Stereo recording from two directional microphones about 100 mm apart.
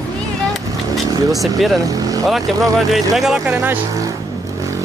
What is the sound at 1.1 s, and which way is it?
Speech, 35° right (ahead or behind).